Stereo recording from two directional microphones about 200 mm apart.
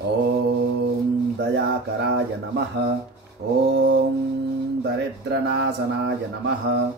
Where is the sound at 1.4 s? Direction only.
60° right (ahead or behind).